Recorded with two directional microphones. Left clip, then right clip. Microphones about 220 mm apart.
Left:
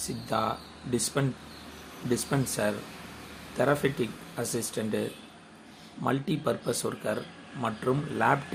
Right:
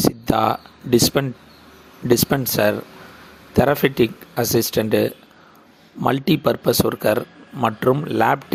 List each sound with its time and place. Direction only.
0.3 s speech: 45° right (ahead or behind)